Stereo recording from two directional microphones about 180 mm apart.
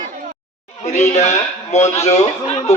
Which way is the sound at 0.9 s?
40° left (ahead or behind).